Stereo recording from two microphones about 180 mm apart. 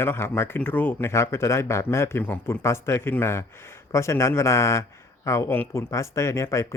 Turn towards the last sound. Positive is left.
turn(degrees=15)  # may be behind; listen again after turning